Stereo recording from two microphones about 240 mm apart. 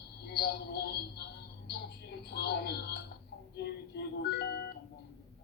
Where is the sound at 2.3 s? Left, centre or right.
Left.